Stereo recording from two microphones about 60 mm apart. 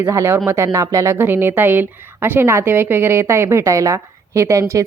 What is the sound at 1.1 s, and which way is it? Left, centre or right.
A woman's voice, right.